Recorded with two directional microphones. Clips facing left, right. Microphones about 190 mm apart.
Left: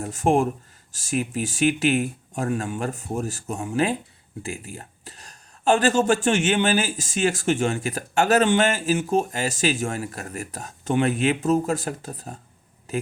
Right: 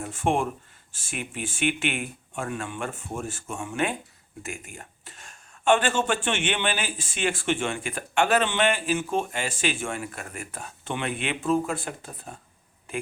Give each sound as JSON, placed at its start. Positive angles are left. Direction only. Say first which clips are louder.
{"t": 0.0, "sound": "speech", "louder": "left 5 dB", "side_deg": 40}